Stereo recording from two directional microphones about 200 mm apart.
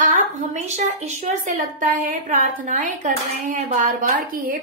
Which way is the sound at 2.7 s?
40° right (ahead or behind).